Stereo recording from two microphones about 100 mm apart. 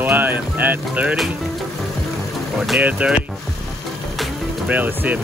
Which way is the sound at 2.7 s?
10° right (ahead or behind).